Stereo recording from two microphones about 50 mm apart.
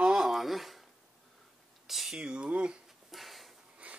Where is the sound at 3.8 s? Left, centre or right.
Right.